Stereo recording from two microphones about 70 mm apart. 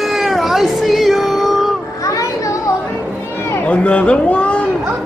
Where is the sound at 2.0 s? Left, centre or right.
Left.